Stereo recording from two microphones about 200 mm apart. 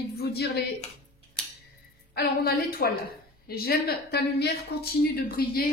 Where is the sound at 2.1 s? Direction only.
50° left (ahead or behind).